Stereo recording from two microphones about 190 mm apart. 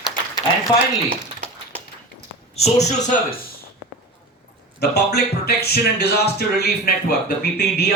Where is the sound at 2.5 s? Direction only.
35° left (ahead or behind).